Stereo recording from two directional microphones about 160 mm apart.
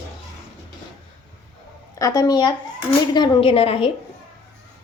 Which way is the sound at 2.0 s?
25° left (ahead or behind).